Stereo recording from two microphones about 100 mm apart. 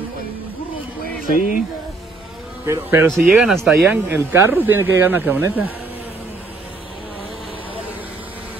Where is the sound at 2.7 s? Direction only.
20° right (ahead or behind).